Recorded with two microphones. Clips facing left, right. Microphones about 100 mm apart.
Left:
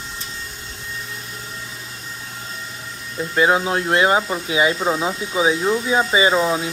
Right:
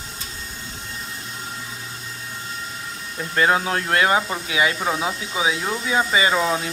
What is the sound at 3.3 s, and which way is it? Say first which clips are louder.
Speech: left 2 dB; 15° left (ahead or behind).